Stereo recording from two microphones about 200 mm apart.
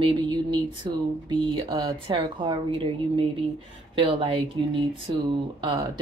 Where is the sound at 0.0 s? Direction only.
25° right (ahead or behind).